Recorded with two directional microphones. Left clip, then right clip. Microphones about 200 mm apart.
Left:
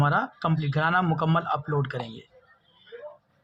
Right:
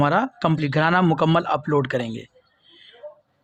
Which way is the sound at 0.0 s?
45° right (ahead or behind).